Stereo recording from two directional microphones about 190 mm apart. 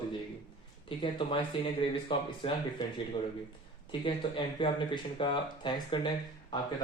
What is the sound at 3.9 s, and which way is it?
Speech, 25° left (ahead or behind).